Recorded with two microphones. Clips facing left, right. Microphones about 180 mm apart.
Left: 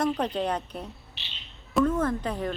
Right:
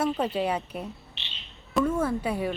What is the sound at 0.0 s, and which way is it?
A woman's voice, 5° right (ahead or behind).